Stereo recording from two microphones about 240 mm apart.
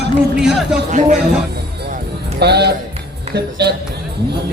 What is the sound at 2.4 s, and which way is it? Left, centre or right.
Speech, right.